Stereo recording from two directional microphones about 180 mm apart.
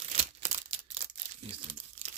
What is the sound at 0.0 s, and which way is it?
Tearing, 40° right (ahead or behind).